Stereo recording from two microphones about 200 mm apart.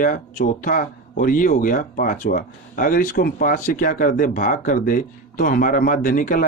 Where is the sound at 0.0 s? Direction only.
40° left (ahead or behind).